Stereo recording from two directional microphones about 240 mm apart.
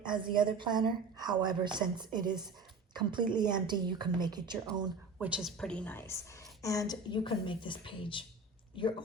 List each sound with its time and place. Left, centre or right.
0.0 s a woman's voice: centre
5.2 s a woman's voice: centre; by 9.0 s left